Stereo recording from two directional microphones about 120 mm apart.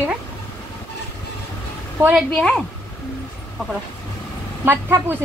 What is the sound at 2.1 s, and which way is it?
Speech, 5° left (ahead or behind).